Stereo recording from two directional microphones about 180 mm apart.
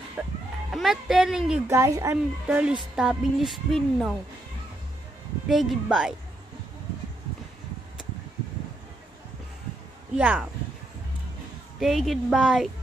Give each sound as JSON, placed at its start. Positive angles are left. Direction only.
{"t": 0.2, "sound": "a woman's voice", "side_deg": -5}
{"t": 1.7, "sound": "speech", "side_deg": -15}
{"t": 2.4, "sound": "a woman's voice", "side_deg": -5}
{"t": 5.5, "sound": "a woman's voice", "side_deg": 0}
{"t": 10.1, "sound": "a woman's voice", "side_deg": -5}
{"t": 11.8, "sound": "a woman's voice", "side_deg": 0}